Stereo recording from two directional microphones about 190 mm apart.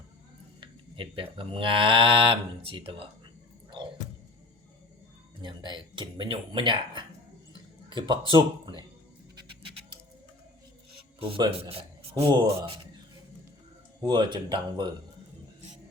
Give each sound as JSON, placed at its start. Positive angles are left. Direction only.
{"t": 0.6, "sound": "livestock", "side_deg": -25}
{"t": 3.8, "sound": "music", "side_deg": -25}
{"t": 5.4, "sound": "livestock", "side_deg": -25}
{"t": 7.5, "sound": "a sound", "side_deg": -25}
{"t": 9.3, "sound": "music", "side_deg": -25}
{"t": 11.2, "sound": "a man's voice", "side_deg": -25}
{"t": 14.0, "sound": "livestock", "side_deg": -20}